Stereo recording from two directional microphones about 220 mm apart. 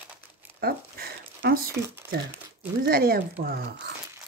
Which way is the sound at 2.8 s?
40° right (ahead or behind).